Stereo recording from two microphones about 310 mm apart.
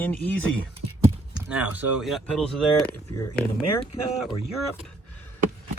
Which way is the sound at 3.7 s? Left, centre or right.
Centre.